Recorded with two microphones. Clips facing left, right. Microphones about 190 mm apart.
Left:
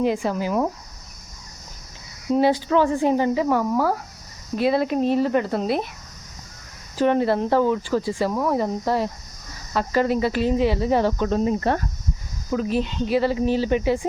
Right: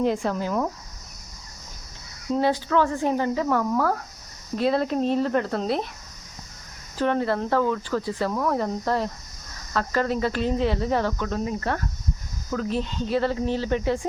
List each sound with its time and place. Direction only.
0.0 s speech: 5° left (ahead or behind)
2.3 s speech: 15° left (ahead or behind)
7.0 s speech: 15° left (ahead or behind)
11.3 s speech: 25° left (ahead or behind)
12.5 s speech: 15° left (ahead or behind)